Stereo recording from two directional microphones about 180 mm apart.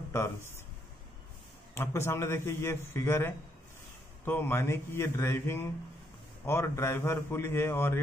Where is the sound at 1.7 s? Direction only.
15° left (ahead or behind).